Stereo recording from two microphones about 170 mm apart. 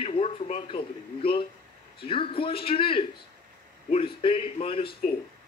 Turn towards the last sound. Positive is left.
turn(degrees=35)  # may be behind; listen again after turning